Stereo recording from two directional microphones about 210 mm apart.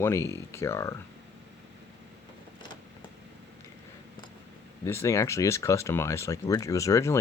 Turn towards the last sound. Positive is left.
turn(degrees=15)  # may be behind; listen again after turning